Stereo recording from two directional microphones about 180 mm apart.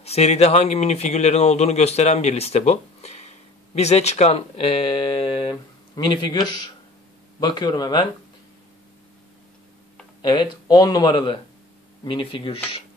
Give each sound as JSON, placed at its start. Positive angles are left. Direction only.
{"t": 0.0, "sound": "a man's voice", "side_deg": 35}
{"t": 7.3, "sound": "speech", "side_deg": 25}
{"t": 10.2, "sound": "speech", "side_deg": 25}